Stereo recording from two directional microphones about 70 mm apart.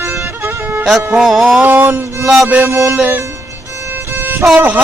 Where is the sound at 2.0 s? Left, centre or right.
Right.